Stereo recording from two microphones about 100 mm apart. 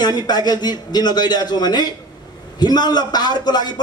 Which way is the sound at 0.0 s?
45° left (ahead or behind).